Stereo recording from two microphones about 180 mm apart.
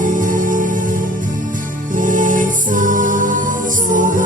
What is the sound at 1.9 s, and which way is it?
Music, 45° right (ahead or behind).